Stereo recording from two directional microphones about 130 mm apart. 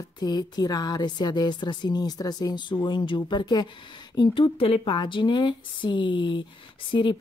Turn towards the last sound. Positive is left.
turn(degrees=35)  # may be behind; listen again after turning